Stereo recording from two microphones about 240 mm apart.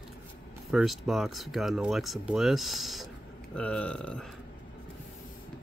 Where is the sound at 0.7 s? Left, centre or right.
Centre.